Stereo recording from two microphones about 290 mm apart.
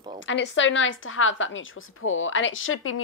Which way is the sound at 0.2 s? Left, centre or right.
Left.